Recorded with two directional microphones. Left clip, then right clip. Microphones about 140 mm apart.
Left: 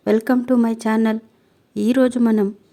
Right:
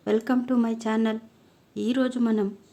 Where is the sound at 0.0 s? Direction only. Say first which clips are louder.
Left 7 dB; 40° left (ahead or behind).